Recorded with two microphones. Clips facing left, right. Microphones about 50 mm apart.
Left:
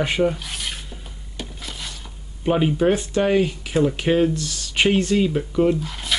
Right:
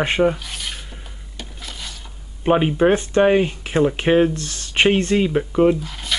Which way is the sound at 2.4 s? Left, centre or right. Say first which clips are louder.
Right 3 dB; right.